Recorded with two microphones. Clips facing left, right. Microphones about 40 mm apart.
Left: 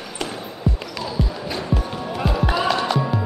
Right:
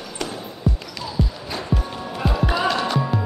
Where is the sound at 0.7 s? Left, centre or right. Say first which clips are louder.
Even; centre.